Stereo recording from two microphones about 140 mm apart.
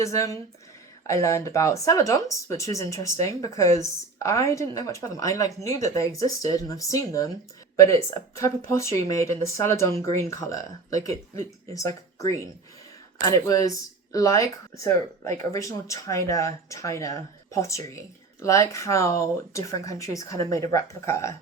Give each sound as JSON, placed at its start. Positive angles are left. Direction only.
{"t": 0.0, "sound": "speech", "side_deg": 20}